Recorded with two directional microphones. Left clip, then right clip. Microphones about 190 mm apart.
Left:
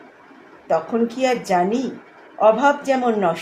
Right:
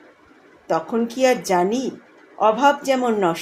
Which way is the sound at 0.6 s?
40° right (ahead or behind).